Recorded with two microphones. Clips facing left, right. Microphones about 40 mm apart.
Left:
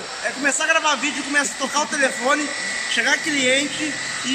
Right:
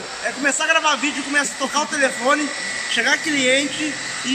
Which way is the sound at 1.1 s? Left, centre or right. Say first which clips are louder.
Right 1 dB; centre.